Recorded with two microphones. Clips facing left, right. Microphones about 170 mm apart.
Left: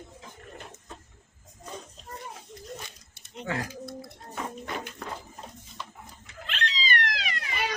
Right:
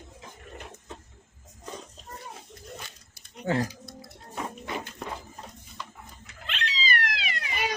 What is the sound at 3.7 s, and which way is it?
Bird, 55° left (ahead or behind).